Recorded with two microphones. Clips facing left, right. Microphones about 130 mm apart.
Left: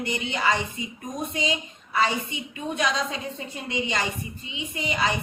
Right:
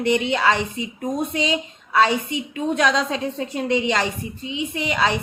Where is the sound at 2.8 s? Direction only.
90° right.